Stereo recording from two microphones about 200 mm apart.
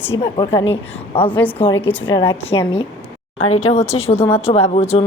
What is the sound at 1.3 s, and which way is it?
Speech, 10° left (ahead or behind).